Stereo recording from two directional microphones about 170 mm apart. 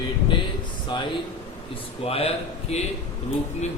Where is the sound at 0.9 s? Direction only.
25° left (ahead or behind).